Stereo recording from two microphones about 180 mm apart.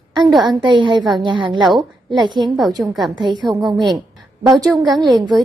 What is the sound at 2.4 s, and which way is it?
Speech, centre (ahead or behind).